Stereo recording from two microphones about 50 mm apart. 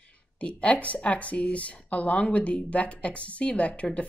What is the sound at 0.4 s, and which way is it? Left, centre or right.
Speech, left.